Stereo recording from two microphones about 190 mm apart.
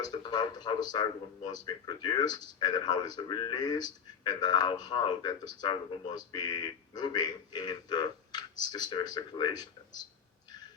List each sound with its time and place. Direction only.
0.0 s speech: 25° left (ahead or behind)